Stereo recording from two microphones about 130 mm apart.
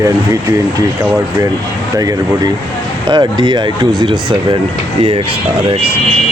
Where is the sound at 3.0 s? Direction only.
35° right (ahead or behind).